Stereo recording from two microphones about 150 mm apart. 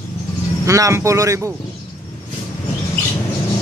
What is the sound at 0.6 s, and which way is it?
Speech, 20° right (ahead or behind).